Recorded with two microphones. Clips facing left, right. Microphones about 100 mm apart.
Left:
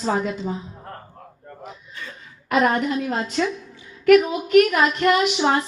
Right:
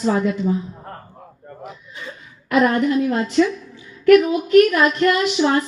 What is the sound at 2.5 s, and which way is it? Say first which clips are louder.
Speech: right 3 dB; 25° left (ahead or behind).